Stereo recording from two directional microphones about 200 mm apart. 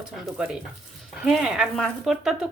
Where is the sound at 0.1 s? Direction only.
5° right (ahead or behind).